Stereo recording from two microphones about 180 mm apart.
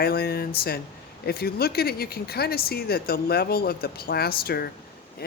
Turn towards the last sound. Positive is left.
turn(degrees=60)  # may be behind; listen again after turning